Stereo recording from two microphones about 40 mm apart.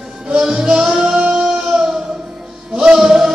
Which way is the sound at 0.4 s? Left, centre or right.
Centre.